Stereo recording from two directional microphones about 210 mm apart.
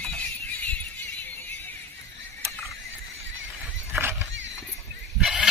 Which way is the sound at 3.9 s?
10° right (ahead or behind).